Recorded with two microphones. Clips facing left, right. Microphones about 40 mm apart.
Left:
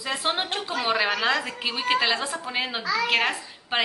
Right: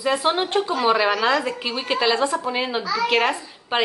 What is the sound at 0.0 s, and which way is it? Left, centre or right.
A woman's voice, centre.